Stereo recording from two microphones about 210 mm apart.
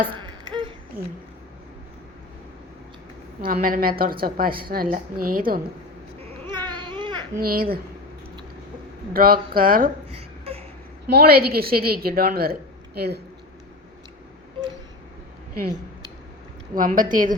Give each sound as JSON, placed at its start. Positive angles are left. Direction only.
{"t": 0.1, "sound": "a sound", "side_deg": -20}
{"t": 3.4, "sound": "a woman's voice", "side_deg": -40}
{"t": 6.7, "sound": "baby cry", "side_deg": -20}
{"t": 7.3, "sound": "a woman's voice", "side_deg": -45}
{"t": 9.1, "sound": "a woman's voice", "side_deg": -45}
{"t": 10.1, "sound": "a sound", "side_deg": -30}
{"t": 11.1, "sound": "a woman's voice", "side_deg": -45}
{"t": 16.7, "sound": "a woman's voice", "side_deg": -40}